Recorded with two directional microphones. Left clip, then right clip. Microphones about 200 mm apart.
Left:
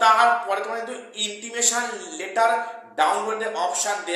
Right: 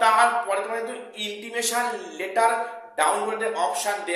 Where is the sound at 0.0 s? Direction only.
5° right (ahead or behind).